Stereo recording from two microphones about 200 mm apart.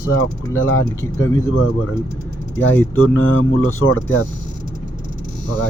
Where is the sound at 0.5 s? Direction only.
90° left.